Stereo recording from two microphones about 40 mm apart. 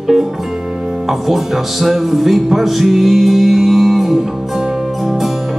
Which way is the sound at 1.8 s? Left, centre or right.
Centre.